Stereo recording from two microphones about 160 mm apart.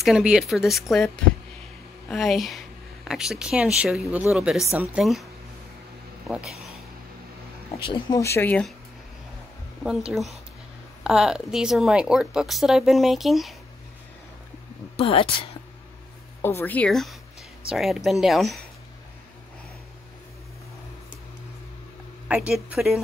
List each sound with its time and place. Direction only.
0.0 s speech: 5° right (ahead or behind)
6.2 s speech: centre (ahead or behind)
8.2 s speech: 15° left (ahead or behind)
9.8 s speech: centre (ahead or behind)
15.0 s speech: 35° left (ahead or behind)
16.3 s speech: 15° left (ahead or behind)
22.3 s speech: 10° right (ahead or behind)